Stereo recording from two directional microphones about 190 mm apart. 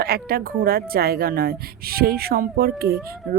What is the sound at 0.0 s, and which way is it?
Speech, 55° right (ahead or behind).